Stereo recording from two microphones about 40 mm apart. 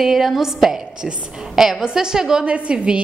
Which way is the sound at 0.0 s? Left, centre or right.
Centre.